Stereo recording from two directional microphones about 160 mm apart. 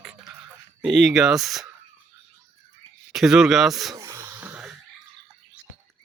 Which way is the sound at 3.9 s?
20° right (ahead or behind).